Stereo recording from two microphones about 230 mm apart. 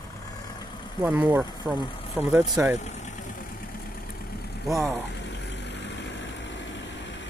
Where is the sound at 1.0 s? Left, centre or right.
Centre.